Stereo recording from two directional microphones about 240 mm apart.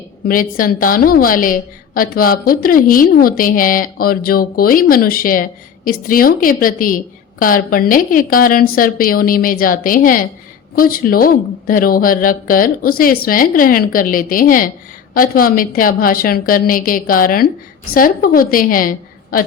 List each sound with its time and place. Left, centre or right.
0.3 s a woman's voice: left